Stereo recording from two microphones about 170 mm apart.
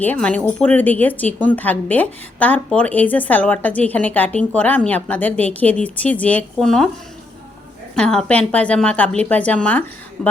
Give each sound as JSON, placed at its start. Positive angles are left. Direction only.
{"t": 0.0, "sound": "speech", "side_deg": 10}
{"t": 7.9, "sound": "speech", "side_deg": 5}